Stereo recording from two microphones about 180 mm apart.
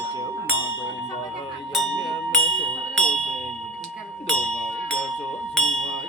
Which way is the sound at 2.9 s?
5° left (ahead or behind).